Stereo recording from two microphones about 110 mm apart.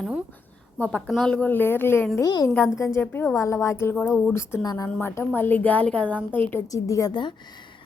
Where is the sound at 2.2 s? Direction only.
40° left (ahead or behind).